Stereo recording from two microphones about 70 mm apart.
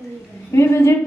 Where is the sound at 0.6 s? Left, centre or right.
Left.